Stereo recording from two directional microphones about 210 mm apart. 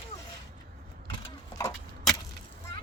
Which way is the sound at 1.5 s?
15° left (ahead or behind).